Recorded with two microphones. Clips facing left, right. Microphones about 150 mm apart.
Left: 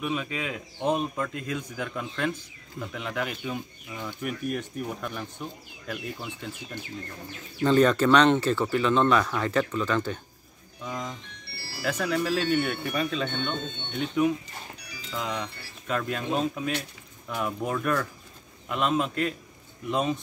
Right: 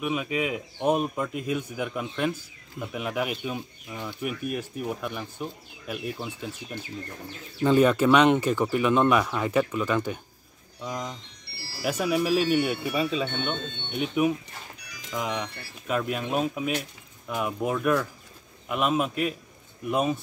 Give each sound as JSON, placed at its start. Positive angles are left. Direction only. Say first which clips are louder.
{"t": 0.0, "sound": "a man's voice", "louder": "right 3 dB", "side_deg": -10}
{"t": 11.5, "sound": "music", "louder": "left 1 dB", "side_deg": 55}
{"t": 11.8, "sound": "a man's voice", "louder": "right 2 dB", "side_deg": -10}